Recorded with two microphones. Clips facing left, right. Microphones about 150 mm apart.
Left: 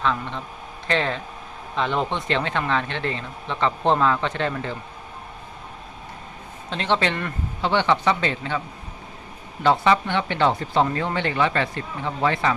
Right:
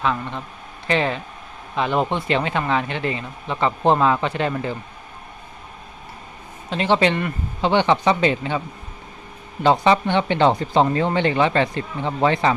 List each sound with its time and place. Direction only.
0.0 s speech: 10° right (ahead or behind)
6.7 s speech: 10° right (ahead or behind)
9.6 s speech: 20° right (ahead or behind)